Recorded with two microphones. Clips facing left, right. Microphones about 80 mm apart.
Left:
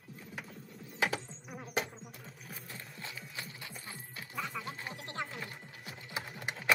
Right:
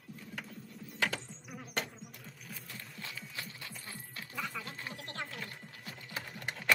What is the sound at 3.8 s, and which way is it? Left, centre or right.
Music, left.